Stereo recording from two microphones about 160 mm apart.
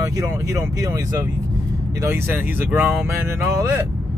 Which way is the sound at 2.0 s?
15° right (ahead or behind).